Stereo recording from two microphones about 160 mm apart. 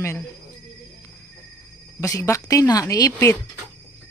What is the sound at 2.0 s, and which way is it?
A woman's voice, 20° left (ahead or behind).